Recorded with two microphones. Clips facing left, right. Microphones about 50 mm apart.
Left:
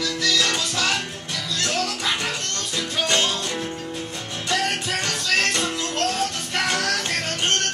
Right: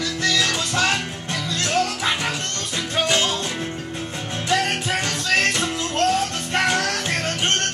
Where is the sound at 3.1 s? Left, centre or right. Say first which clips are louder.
Even; centre.